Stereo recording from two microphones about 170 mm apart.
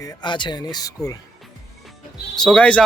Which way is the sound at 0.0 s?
25° left (ahead or behind).